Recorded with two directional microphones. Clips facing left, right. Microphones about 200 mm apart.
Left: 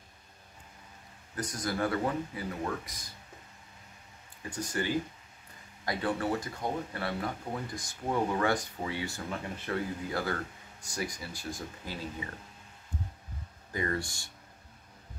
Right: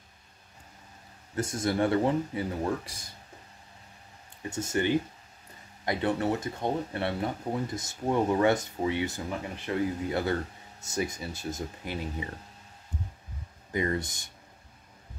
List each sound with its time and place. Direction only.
1.3 s speech: 25° right (ahead or behind)
4.4 s speech: 25° right (ahead or behind)
13.7 s speech: 20° right (ahead or behind)